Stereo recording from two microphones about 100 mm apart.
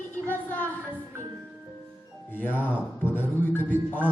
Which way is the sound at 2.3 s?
20° left (ahead or behind).